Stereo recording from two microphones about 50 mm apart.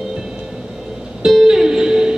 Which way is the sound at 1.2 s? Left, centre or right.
Centre.